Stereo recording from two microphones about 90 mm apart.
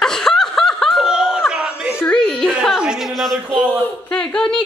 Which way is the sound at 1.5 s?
10° right (ahead or behind).